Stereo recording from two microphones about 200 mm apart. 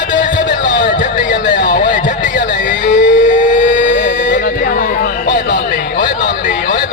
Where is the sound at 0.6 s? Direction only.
60° left (ahead or behind).